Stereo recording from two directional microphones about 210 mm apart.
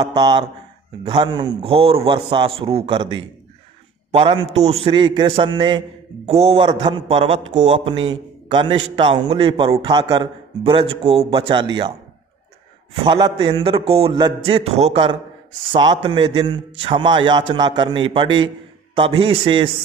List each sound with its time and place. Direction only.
0.0 s a man's voice: 20° right (ahead or behind)
13.0 s a man's voice: 20° right (ahead or behind)